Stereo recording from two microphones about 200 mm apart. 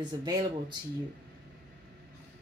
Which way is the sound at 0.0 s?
20° right (ahead or behind).